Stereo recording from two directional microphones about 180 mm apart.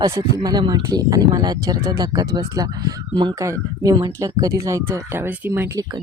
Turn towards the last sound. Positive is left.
turn(degrees=-20)  # may be behind; listen again after turning